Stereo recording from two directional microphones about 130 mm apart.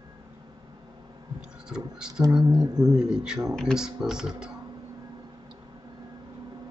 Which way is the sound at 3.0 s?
5° right (ahead or behind).